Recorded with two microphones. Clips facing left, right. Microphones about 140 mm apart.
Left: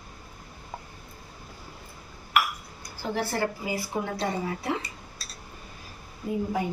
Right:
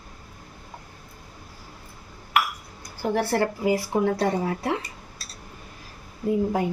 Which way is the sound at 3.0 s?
60° right (ahead or behind).